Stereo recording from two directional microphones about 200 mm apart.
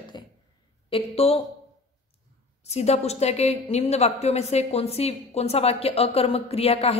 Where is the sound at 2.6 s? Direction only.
30° left (ahead or behind).